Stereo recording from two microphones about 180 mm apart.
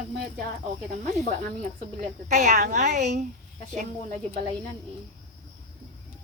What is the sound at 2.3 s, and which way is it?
Speech, 40° right (ahead or behind).